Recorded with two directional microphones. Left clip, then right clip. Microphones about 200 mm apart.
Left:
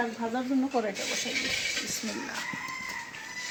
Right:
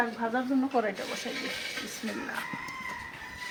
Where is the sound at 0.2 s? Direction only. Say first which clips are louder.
Right 1 dB; 5° left (ahead or behind).